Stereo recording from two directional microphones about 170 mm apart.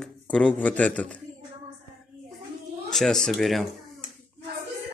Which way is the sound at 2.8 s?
Centre (ahead or behind).